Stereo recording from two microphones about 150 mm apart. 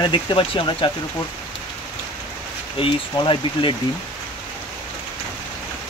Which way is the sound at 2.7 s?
35° left (ahead or behind).